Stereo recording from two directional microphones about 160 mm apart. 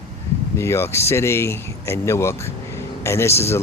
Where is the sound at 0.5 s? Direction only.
15° left (ahead or behind).